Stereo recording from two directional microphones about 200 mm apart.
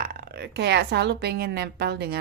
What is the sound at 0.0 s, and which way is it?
A woman's voice, 50° right (ahead or behind).